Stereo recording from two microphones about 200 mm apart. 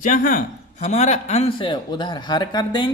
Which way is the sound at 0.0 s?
40° left (ahead or behind).